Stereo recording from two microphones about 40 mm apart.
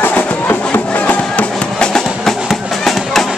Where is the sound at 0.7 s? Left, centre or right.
Left.